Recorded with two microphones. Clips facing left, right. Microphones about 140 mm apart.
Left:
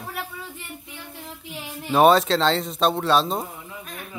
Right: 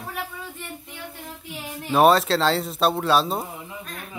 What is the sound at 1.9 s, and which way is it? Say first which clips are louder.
Speech: left 1 dB; centre (ahead or behind).